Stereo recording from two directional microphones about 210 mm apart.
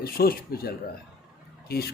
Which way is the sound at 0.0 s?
45° left (ahead or behind).